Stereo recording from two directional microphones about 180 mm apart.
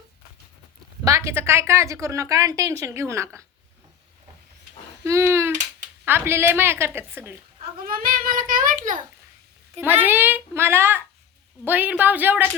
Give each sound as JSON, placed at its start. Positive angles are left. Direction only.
{"t": 1.0, "sound": "a woman's voice", "side_deg": -15}
{"t": 5.0, "sound": "a woman's voice", "side_deg": -15}
{"t": 7.6, "sound": "child singing", "side_deg": -55}
{"t": 9.8, "sound": "a woman's voice", "side_deg": -10}